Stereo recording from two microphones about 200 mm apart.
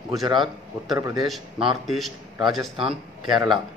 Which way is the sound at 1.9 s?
Centre (ahead or behind).